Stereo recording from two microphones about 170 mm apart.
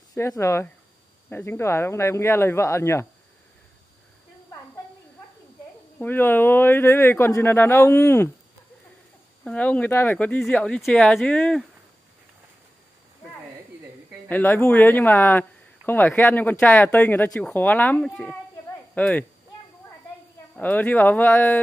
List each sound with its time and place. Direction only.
0.2 s speech: 15° left (ahead or behind)
5.9 s speech: 10° left (ahead or behind)
9.4 s speech: 10° left (ahead or behind)
14.3 s speech: 10° left (ahead or behind)
20.5 s speech: 10° left (ahead or behind)